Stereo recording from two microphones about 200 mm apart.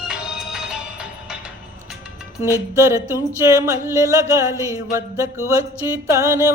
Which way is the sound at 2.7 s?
15° right (ahead or behind).